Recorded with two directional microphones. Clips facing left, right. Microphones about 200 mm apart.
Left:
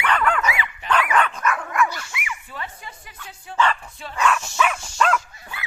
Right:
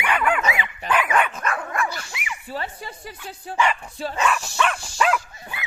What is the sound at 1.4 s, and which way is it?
Dog, 30° right (ahead or behind).